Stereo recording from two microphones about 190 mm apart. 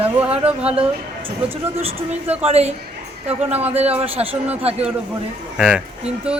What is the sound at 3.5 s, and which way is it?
Speech, 10° right (ahead or behind).